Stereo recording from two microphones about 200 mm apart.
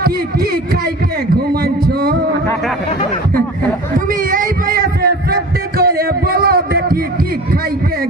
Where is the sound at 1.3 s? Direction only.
50° right (ahead or behind).